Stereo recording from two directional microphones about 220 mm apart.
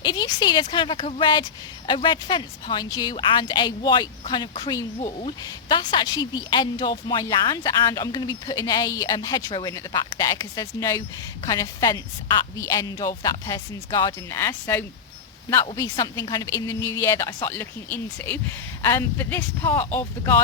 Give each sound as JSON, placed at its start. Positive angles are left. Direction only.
{"t": 0.0, "sound": "speech", "side_deg": 20}